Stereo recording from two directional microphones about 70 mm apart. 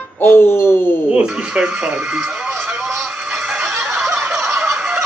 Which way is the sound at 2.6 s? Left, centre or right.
Centre.